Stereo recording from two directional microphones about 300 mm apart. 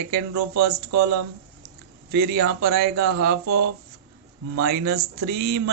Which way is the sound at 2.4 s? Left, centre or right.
Right.